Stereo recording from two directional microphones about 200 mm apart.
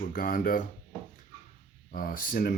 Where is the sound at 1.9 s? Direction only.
45° left (ahead or behind).